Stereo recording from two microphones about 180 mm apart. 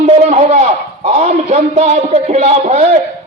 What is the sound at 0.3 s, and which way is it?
A man's voice, 40° right (ahead or behind).